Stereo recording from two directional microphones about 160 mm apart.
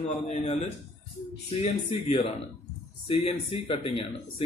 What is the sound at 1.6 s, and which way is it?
Speech, 40° left (ahead or behind).